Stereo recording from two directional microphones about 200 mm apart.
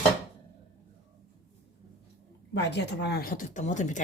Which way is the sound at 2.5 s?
60° left (ahead or behind).